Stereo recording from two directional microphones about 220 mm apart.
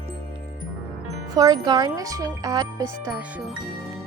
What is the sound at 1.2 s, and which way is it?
A child's voice, 15° right (ahead or behind).